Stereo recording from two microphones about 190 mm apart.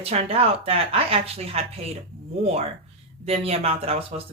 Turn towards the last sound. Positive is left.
turn(degrees=-30)  # may be behind; listen again after turning